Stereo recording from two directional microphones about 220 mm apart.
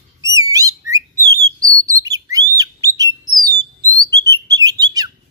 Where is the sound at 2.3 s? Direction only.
15° right (ahead or behind).